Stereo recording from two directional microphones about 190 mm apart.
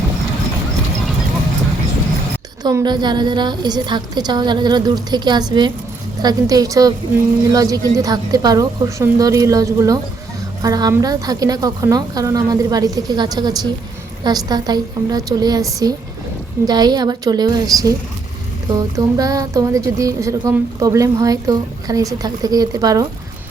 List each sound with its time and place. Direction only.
2.6 s a woman's voice: 20° right (ahead or behind)